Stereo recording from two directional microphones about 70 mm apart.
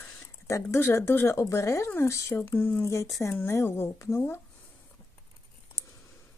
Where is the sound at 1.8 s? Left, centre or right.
Left.